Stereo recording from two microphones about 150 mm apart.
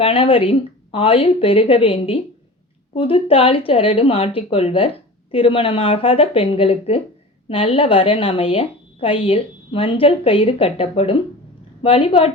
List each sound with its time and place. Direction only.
0.0 s a woman's voice: 40° left (ahead or behind)